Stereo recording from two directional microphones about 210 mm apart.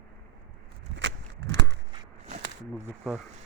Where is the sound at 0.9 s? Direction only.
55° right (ahead or behind).